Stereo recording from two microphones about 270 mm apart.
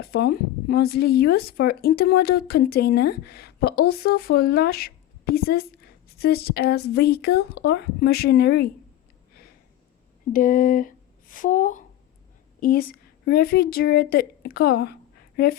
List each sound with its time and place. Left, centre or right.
0.0 s speech: left
10.3 s a woman's voice: left